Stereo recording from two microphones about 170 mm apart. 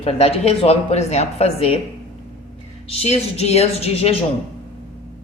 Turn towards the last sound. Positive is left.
turn(degrees=35)  # may be behind; listen again after turning